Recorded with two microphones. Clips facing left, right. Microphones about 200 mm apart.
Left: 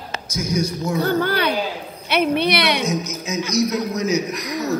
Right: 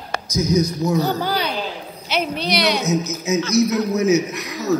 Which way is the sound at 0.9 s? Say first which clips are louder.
Left 4 dB; 60° left (ahead or behind).